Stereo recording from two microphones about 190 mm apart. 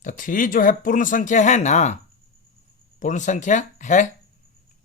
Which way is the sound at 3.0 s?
40° left (ahead or behind).